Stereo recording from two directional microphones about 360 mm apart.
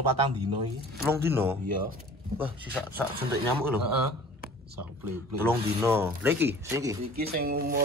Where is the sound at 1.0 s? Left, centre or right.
Centre.